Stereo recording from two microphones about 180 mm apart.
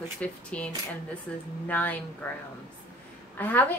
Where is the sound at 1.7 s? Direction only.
10° left (ahead or behind).